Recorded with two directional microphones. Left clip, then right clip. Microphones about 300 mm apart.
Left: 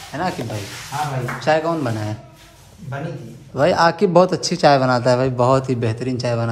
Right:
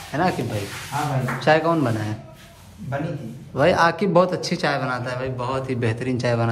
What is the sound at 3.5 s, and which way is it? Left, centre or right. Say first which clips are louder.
A man's voice: left 2 dB; centre.